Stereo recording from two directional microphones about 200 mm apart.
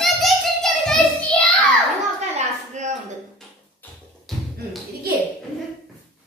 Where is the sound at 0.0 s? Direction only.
Centre (ahead or behind).